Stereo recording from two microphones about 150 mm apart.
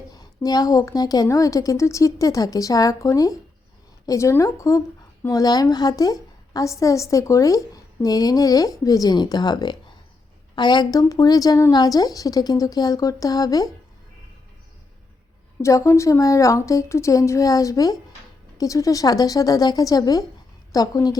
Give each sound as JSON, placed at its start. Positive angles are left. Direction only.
{"t": 0.2, "sound": "speech", "side_deg": 25}
{"t": 15.6, "sound": "speech", "side_deg": 20}